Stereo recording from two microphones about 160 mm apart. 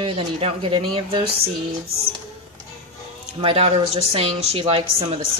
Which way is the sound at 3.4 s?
40° right (ahead or behind).